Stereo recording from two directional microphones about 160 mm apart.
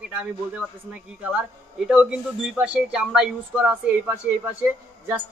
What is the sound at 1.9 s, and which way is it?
Speech, 5° right (ahead or behind).